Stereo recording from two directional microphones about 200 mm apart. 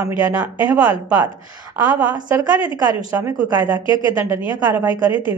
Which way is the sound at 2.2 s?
10° right (ahead or behind).